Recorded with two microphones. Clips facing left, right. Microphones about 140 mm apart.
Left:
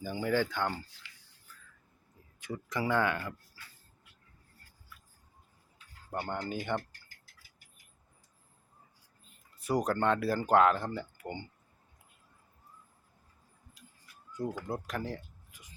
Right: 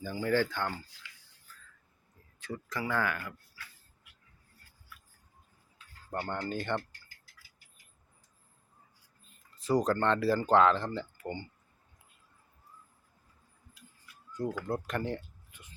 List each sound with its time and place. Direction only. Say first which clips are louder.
0.0 s speech: right 1 dB; 15° left (ahead or behind)
2.4 s speech: left 2 dB; 15° left (ahead or behind)
6.1 s speech: right 1 dB; 10° left (ahead or behind)
9.6 s speech: right 2 dB; 10° left (ahead or behind)
14.3 s speech: right 2 dB; 5° left (ahead or behind)